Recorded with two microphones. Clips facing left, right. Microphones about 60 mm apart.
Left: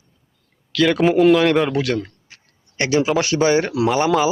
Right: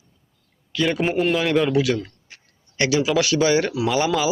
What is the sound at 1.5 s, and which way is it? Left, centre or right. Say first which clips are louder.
Speech: left 1 dB; left.